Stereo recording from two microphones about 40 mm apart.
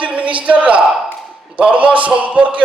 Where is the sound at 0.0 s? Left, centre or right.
Right.